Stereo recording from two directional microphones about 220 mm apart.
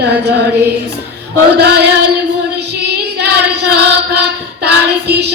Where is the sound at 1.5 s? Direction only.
50° right (ahead or behind).